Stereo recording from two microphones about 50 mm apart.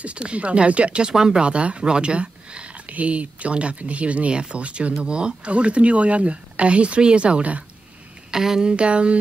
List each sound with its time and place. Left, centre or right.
0.0 s speech: right
8.3 s speech: centre